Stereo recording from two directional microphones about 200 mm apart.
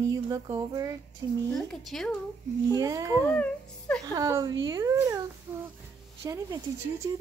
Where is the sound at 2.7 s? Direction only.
15° right (ahead or behind).